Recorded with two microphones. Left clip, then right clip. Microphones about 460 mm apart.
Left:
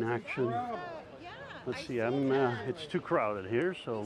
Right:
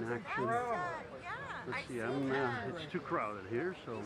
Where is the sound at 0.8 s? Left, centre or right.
Right.